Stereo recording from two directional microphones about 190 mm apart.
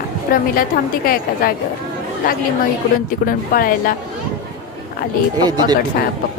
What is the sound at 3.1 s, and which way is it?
Speech, 50° left (ahead or behind).